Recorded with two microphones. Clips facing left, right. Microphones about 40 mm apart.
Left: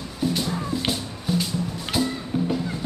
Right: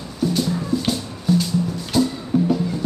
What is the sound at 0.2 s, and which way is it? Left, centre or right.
Music, centre.